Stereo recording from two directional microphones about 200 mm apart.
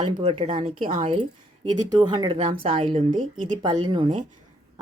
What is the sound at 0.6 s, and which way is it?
Speech, 40° right (ahead or behind).